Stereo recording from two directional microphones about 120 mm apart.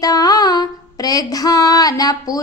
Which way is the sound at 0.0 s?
30° left (ahead or behind).